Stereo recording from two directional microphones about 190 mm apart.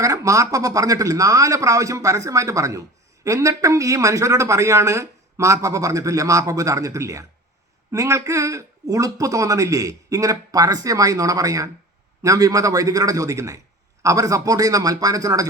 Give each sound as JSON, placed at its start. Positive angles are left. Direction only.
{"t": 0.0, "sound": "a man's voice", "side_deg": -15}